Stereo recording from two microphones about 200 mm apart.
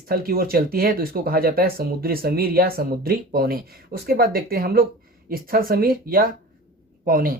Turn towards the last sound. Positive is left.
turn(degrees=-45)  # may be behind; listen again after turning